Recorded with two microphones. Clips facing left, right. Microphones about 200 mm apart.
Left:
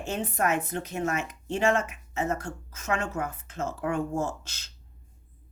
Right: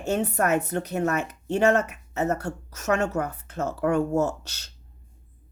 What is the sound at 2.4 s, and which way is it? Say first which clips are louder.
Speech: right 5 dB; 65° right (ahead or behind).